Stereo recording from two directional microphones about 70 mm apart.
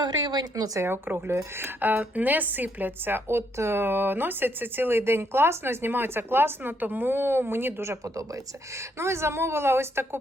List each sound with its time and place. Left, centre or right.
0.0 s speech: right
0.8 s speech: right
9.0 s speech: right